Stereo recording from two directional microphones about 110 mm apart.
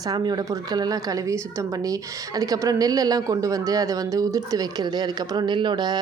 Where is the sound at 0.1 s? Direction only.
35° right (ahead or behind).